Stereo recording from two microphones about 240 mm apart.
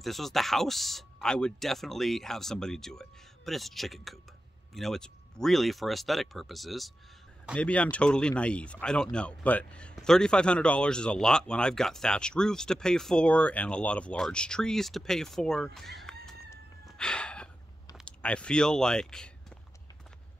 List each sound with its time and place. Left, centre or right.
0.0 s speech: centre